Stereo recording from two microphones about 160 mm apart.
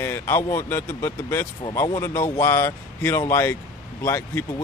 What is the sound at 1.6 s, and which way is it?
Speech, 25° left (ahead or behind).